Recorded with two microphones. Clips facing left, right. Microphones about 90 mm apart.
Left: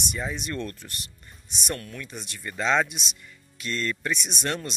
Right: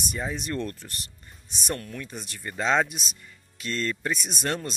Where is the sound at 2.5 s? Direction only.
20° right (ahead or behind).